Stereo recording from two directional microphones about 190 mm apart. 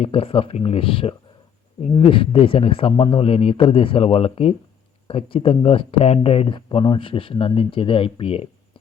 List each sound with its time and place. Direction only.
0.0 s speech: 30° left (ahead or behind)